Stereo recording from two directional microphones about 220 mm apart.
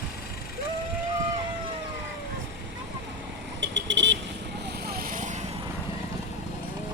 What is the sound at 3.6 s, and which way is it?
Vehicle, 55° right (ahead or behind).